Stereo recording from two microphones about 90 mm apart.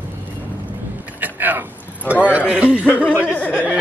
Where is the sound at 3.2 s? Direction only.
15° left (ahead or behind).